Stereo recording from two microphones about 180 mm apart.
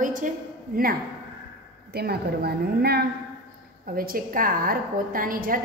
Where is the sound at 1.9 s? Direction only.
60° right (ahead or behind).